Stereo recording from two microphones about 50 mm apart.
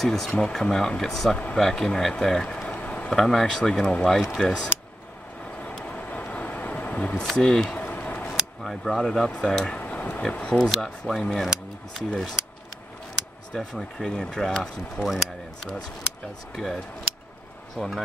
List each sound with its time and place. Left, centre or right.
0.0 s speech: centre
2.7 s a sound: left
3.1 s speech: centre
5.9 s a sound: left
7.3 s speech: centre
7.7 s a sound: left
8.6 s speech: centre
9.8 s a sound: left
10.7 s speech: centre
13.6 s speech: centre
15.0 s speech: centre
16.5 s speech: centre